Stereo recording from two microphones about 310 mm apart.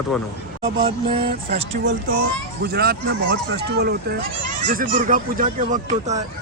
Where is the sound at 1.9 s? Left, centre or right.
Right.